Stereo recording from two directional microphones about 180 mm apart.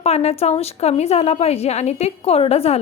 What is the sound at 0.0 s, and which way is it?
A woman's voice, 35° left (ahead or behind).